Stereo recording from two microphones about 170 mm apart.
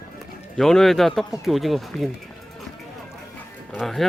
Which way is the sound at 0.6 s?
Centre (ahead or behind).